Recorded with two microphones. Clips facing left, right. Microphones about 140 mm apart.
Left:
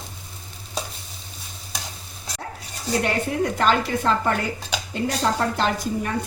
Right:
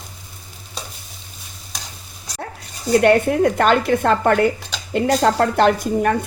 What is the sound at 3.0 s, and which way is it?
A woman's voice, 60° right (ahead or behind).